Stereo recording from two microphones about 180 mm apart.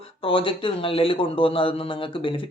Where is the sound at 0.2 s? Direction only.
30° left (ahead or behind).